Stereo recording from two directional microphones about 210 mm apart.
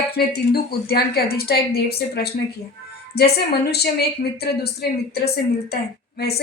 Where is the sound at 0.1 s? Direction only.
50° left (ahead or behind).